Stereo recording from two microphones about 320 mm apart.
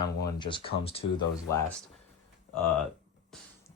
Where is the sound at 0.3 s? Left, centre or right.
Centre.